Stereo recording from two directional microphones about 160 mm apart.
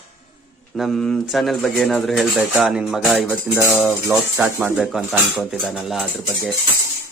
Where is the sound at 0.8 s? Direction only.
5° left (ahead or behind).